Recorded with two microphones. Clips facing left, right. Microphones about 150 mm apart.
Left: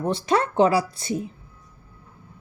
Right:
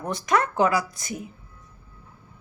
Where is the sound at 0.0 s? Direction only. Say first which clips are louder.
Left 2 dB; 30° left (ahead or behind).